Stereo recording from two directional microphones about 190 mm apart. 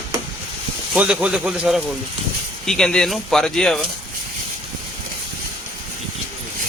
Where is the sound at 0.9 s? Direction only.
5° right (ahead or behind).